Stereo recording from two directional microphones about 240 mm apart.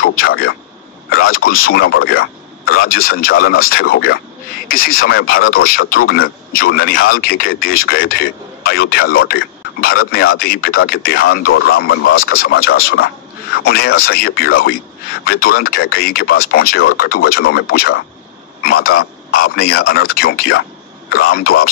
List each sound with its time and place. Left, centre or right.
0.0 s speech: left
1.1 s a sound: left
1.5 s speech: left
3.2 s speech: left
4.6 s speech: left
11.5 s speech: left
12.2 s speech: left